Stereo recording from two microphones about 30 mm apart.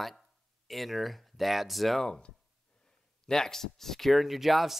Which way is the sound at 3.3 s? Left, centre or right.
Centre.